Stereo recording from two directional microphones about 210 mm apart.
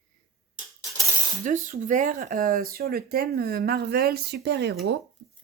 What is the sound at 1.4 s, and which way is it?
Speech, 35° right (ahead or behind).